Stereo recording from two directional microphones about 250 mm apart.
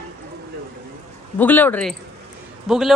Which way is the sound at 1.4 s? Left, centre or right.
Centre.